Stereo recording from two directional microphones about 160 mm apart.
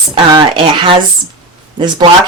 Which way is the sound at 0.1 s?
30° right (ahead or behind).